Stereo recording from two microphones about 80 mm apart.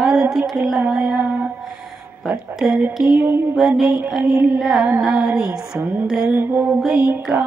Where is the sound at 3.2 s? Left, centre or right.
Right.